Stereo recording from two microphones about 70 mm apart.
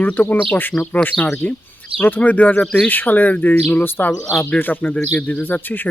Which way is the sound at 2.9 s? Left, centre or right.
Left.